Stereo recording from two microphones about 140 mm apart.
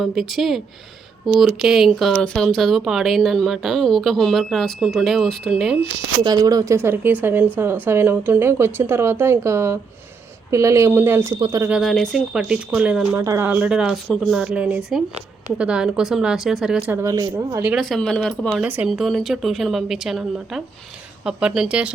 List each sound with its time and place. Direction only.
0.0 s speech: centre (ahead or behind)
6.2 s a woman's voice: 30° right (ahead or behind)
11.7 s a woman's voice: centre (ahead or behind)
16.9 s speech: 25° right (ahead or behind)
17.7 s speech: centre (ahead or behind)
18.6 s a woman's voice: 15° right (ahead or behind)
18.9 s a woman's voice: centre (ahead or behind)